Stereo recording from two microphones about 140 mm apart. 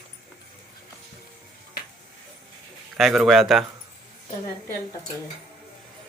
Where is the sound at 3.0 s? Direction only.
Centre (ahead or behind).